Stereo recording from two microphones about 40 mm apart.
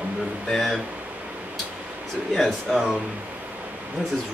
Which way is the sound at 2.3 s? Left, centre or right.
Centre.